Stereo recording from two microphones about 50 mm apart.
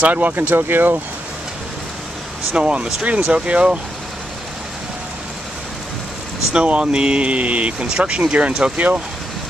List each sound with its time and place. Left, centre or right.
0.0 s speech: right
2.5 s speech: right
6.5 s speech: right